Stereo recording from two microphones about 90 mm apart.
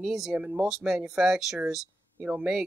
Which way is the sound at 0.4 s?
15° right (ahead or behind).